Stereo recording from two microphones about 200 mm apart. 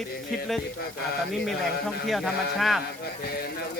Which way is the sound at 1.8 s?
Centre (ahead or behind).